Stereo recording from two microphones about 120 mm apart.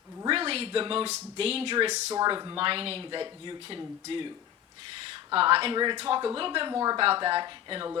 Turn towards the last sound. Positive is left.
turn(degrees=-40)  # may be behind; listen again after turning